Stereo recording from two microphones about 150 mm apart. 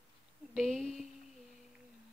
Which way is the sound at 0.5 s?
5° left (ahead or behind).